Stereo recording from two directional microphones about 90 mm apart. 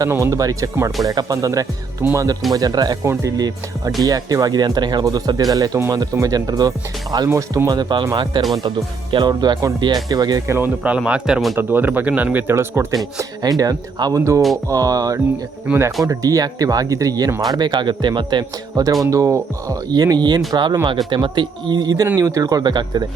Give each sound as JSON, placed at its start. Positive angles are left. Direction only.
{"t": 0.1, "sound": "speech", "side_deg": -35}
{"t": 7.3, "sound": "speech", "side_deg": -35}
{"t": 10.4, "sound": "speech", "side_deg": -30}
{"t": 10.8, "sound": "speech", "side_deg": -10}
{"t": 11.5, "sound": "speech", "side_deg": -20}
{"t": 13.1, "sound": "speech", "side_deg": -45}
{"t": 15.7, "sound": "speech", "side_deg": -10}
{"t": 16.0, "sound": "speech", "side_deg": -40}
{"t": 18.8, "sound": "speech", "side_deg": -45}